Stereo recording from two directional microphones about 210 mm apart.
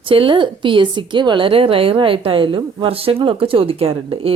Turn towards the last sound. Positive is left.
turn(degrees=-25)  # may be behind; listen again after turning